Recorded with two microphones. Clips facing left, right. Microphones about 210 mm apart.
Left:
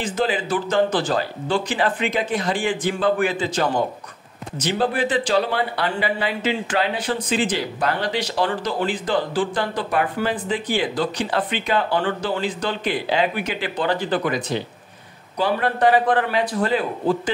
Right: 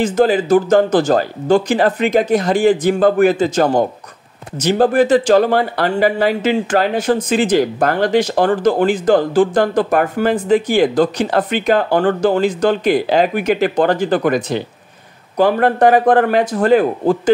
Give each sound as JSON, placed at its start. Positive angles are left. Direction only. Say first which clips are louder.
{"t": 0.0, "sound": "speech", "louder": "right 9 dB", "side_deg": -45}